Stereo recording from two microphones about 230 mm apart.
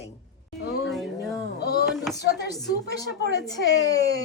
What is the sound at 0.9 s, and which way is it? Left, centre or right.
Speech, centre.